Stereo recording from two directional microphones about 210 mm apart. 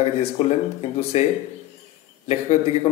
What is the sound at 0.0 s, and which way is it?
A man's voice, 30° left (ahead or behind).